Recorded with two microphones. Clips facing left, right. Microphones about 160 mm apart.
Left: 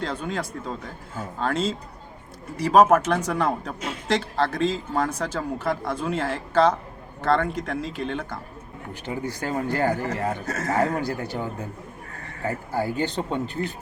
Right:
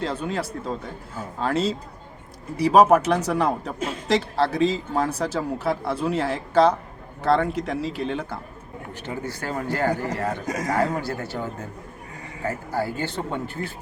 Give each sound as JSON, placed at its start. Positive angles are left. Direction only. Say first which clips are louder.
{"t": 0.0, "sound": "a man's voice", "louder": "right 2 dB", "side_deg": -5}
{"t": 8.9, "sound": "speech", "louder": "left 1 dB", "side_deg": 15}
{"t": 10.4, "sound": "speech", "louder": "right 1 dB", "side_deg": -15}
{"t": 11.0, "sound": "speech", "louder": "left 1 dB", "side_deg": 15}
{"t": 12.5, "sound": "speech", "louder": "even", "side_deg": 15}